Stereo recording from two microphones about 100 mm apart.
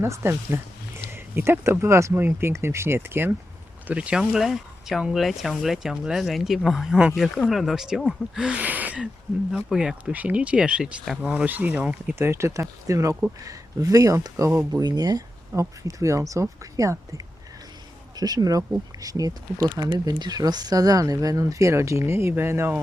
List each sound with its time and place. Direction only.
0.0 s speech: 25° right (ahead or behind)
3.8 s speech: 10° right (ahead or behind)
12.2 s speech: 25° right (ahead or behind)
18.2 s speech: 40° right (ahead or behind)